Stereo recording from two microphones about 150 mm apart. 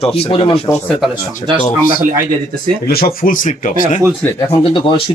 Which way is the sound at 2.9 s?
90° left.